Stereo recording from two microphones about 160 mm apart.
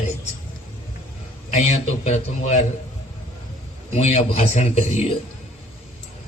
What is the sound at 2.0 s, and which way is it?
Speech, 45° left (ahead or behind).